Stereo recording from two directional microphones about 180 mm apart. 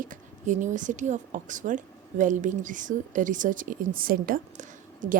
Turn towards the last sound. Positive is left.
turn(degrees=-45)  # may be behind; listen again after turning